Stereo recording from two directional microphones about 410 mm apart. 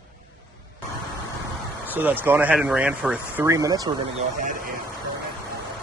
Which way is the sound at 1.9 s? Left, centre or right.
Centre.